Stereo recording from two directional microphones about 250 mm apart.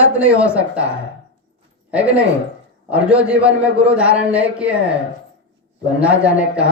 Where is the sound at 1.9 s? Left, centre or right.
Centre.